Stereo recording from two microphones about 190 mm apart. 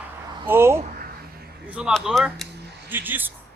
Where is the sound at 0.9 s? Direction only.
55° right (ahead or behind).